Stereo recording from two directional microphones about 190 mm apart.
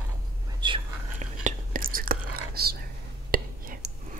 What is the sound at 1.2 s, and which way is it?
Whispering, 40° right (ahead or behind).